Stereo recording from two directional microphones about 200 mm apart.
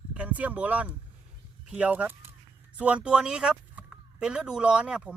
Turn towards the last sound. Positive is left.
turn(degrees=-5)  # may be behind; listen again after turning